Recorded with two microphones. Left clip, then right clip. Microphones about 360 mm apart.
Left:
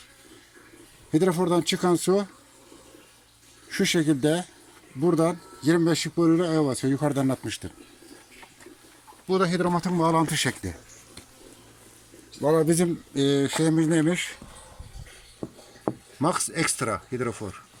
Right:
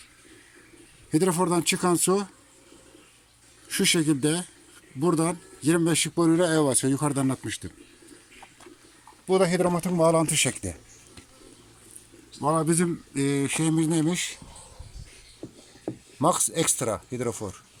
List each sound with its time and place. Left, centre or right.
1.1 s speech: centre
3.7 s speech: centre
9.2 s speech: centre
12.5 s speech: centre
15.4 s a sound: left
16.2 s speech: centre